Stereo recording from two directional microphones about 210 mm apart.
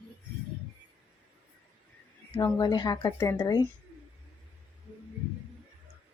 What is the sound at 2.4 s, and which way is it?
Speech, 15° left (ahead or behind).